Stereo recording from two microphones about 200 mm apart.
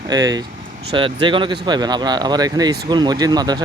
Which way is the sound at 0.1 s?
20° right (ahead or behind).